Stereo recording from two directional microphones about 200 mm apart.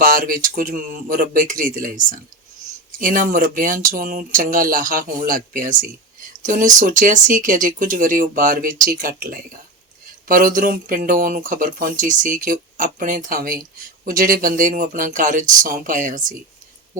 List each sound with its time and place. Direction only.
0.0 s speech: 45° right (ahead or behind)